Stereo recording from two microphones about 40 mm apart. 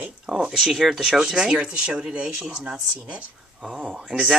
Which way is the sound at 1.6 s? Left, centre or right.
Right.